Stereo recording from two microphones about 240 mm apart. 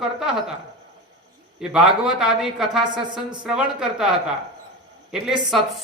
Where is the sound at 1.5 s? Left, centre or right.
Centre.